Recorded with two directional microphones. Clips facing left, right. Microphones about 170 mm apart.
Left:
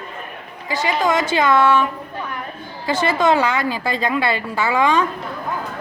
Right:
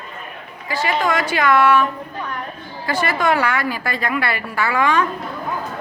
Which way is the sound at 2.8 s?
20° left (ahead or behind).